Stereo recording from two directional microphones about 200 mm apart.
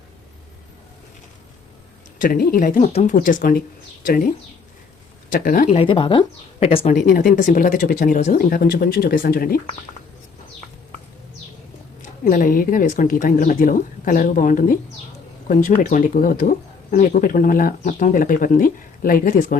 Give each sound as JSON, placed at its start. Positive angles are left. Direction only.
{"t": 2.2, "sound": "speech", "side_deg": 45}
{"t": 5.3, "sound": "speech", "side_deg": 45}
{"t": 5.7, "sound": "speech", "side_deg": 25}
{"t": 6.9, "sound": "speech", "side_deg": 45}
{"t": 12.2, "sound": "speech", "side_deg": 45}
{"t": 15.8, "sound": "speech", "side_deg": 40}